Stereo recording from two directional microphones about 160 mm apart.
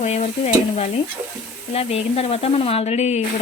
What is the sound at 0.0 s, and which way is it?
Stir, 45° left (ahead or behind).